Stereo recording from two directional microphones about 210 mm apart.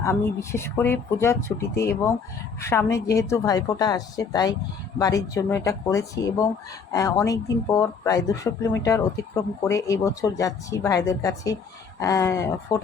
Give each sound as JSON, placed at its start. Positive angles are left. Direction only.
{"t": 0.0, "sound": "speech", "side_deg": 15}